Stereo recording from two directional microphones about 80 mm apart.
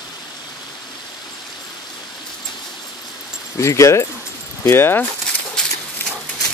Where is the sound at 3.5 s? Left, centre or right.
Left.